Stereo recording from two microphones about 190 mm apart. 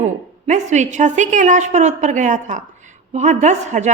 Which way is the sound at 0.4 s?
40° right (ahead or behind).